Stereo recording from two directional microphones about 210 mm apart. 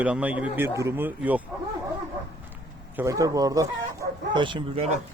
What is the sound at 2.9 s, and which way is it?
Speech, 15° right (ahead or behind).